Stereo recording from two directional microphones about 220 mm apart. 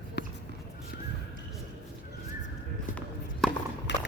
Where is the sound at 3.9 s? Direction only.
55° left (ahead or behind).